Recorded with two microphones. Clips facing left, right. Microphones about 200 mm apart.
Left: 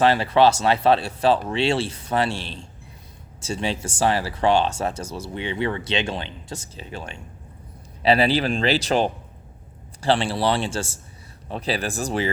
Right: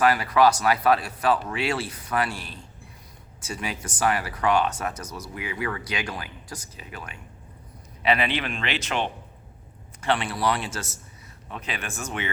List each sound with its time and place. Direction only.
0.0 s a man's voice: 25° left (ahead or behind)